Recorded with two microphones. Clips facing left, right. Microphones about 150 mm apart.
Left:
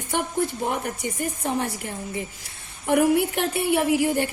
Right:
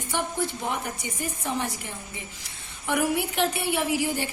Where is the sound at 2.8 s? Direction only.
50° left (ahead or behind).